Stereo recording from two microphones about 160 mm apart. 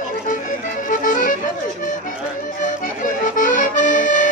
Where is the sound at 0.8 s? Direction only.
55° left (ahead or behind).